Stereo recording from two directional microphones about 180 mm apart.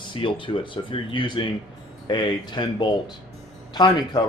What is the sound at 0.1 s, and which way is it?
Speech, 30° left (ahead or behind).